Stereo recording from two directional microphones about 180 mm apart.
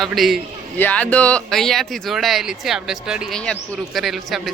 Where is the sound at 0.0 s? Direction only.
Centre (ahead or behind).